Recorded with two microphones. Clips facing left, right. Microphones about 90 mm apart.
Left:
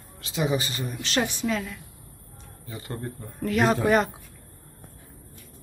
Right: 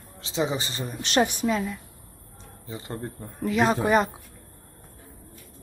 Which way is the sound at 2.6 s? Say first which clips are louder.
Right 1 dB; 25° right (ahead or behind).